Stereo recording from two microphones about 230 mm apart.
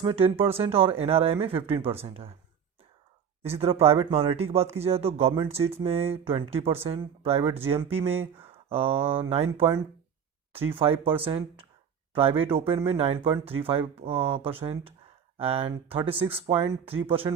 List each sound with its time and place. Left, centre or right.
0.0 s speech: right
3.4 s speech: right
7.9 s speech: centre
8.5 s speech: right
10.8 s speech: right
12.5 s speech: right